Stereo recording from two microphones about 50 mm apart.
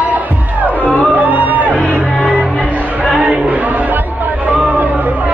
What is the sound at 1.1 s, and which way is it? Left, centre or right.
Music, right.